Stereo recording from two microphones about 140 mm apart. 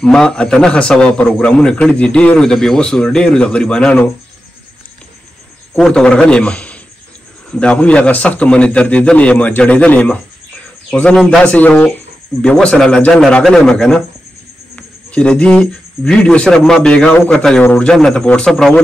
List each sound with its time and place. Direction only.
0.0 s a man's voice: 5° left (ahead or behind)
5.8 s a man's voice: 5° left (ahead or behind)